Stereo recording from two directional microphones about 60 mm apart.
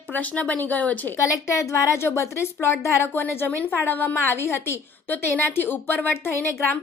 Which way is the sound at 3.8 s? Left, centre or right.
Left.